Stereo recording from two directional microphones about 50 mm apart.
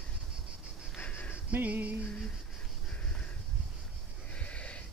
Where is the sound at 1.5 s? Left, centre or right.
Right.